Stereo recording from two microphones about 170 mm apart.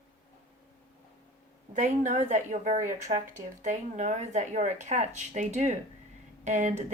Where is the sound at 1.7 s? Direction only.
45° right (ahead or behind).